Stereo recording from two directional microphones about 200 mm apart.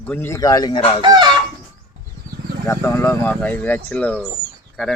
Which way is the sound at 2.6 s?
10° left (ahead or behind).